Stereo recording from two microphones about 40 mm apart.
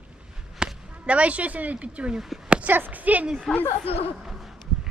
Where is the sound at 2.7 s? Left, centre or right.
Right.